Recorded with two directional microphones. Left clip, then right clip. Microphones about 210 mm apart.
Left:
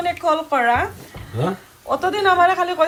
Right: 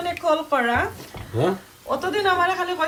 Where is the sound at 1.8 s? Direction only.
10° right (ahead or behind).